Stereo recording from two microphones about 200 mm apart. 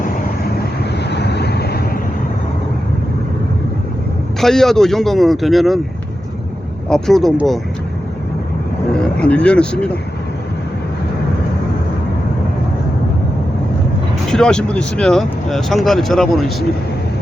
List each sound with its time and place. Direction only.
1.1 s vehicle: 55° left (ahead or behind)
4.4 s speech: centre (ahead or behind)
6.8 s speech: centre (ahead or behind)
9.1 s speech: 5° left (ahead or behind)
14.3 s speech: 5° left (ahead or behind)